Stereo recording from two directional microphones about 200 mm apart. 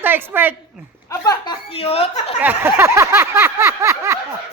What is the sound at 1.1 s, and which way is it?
Speech, 15° left (ahead or behind).